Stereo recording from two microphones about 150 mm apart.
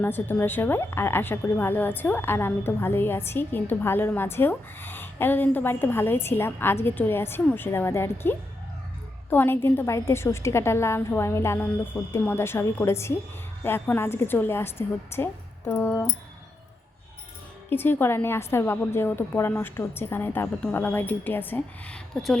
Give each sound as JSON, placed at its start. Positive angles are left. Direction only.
{"t": 0.0, "sound": "speech", "side_deg": 10}
{"t": 17.7, "sound": "speech", "side_deg": 15}